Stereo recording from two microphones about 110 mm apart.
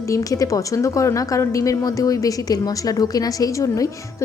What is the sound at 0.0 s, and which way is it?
A woman's voice, 30° left (ahead or behind).